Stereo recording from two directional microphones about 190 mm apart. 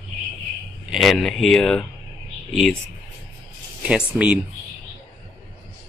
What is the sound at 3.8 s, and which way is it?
Speech, 5° right (ahead or behind).